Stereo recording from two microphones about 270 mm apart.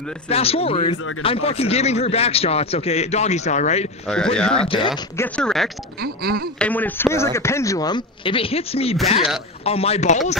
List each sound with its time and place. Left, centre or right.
0.3 s a man's voice: left
4.4 s speech: centre
4.6 s speech: centre
5.9 s a sound: right
6.6 s a man's voice: centre; by 10.3 s left